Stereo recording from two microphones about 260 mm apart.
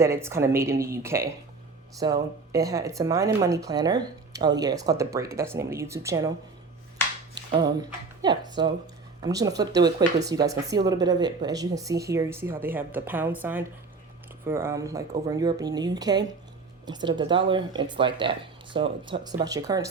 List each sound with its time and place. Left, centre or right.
0.0 s speech: centre
7.3 s speech: centre